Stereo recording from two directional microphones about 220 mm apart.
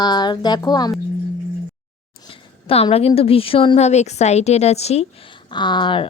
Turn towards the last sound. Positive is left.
turn(degrees=20)  # may be behind; listen again after turning